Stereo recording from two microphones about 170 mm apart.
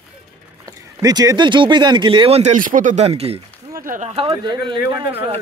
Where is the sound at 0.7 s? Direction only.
20° right (ahead or behind).